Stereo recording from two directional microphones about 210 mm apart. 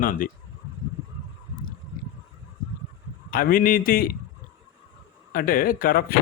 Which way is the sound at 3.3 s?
45° left (ahead or behind).